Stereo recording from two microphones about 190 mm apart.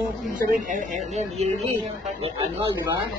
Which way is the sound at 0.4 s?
45° right (ahead or behind).